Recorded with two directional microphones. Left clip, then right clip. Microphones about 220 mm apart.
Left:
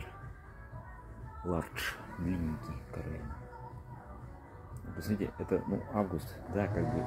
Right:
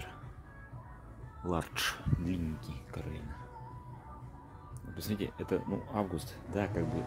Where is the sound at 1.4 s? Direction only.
25° right (ahead or behind).